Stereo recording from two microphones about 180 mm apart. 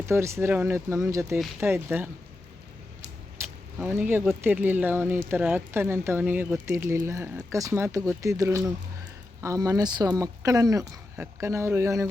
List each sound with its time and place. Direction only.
0.0 s speech: 15° right (ahead or behind)
3.4 s vehicle: 15° right (ahead or behind)
3.8 s speech: 10° right (ahead or behind)